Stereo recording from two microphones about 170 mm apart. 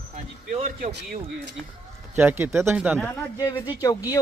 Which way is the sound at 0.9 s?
75° right (ahead or behind).